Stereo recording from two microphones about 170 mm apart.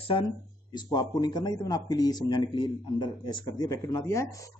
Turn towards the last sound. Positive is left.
turn(degrees=20)  # may be behind; listen again after turning